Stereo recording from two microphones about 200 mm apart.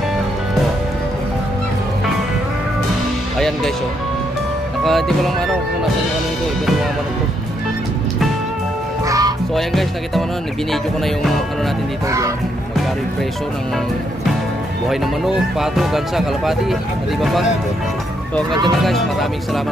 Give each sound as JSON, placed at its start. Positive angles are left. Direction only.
{"t": 3.3, "sound": "speech", "side_deg": 0}
{"t": 4.8, "sound": "speech", "side_deg": 0}
{"t": 9.0, "sound": "music", "side_deg": -15}
{"t": 9.6, "sound": "speech", "side_deg": 0}
{"t": 14.9, "sound": "speech", "side_deg": 0}
{"t": 18.9, "sound": "speech", "side_deg": 0}